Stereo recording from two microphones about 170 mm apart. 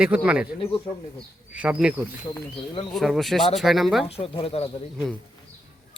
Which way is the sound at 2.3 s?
30° left (ahead or behind).